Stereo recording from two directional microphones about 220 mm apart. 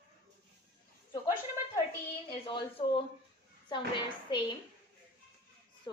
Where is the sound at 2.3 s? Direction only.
25° left (ahead or behind).